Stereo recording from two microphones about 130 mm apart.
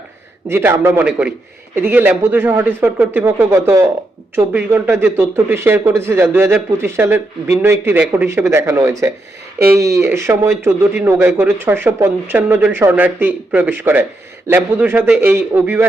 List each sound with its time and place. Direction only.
0.4 s a man's voice: 20° right (ahead or behind)